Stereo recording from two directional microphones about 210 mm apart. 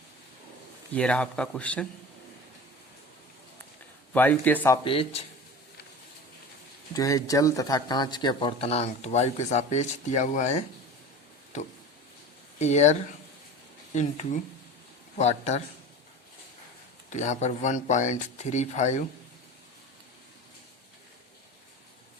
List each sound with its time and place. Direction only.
0.9 s a man's voice: 5° left (ahead or behind)
4.1 s speech: 10° left (ahead or behind)
4.9 s speech: 25° left (ahead or behind)
6.9 s speech: 15° left (ahead or behind); by 10.6 s 35° left (ahead or behind)
12.5 s speech: 35° left (ahead or behind)
17.1 s speech: 35° left (ahead or behind)